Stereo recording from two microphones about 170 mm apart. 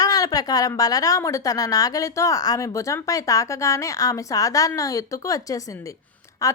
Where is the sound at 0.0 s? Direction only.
20° left (ahead or behind).